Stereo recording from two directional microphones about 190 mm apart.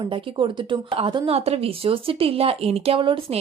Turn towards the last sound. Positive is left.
turn(degrees=-30)  # may be behind; listen again after turning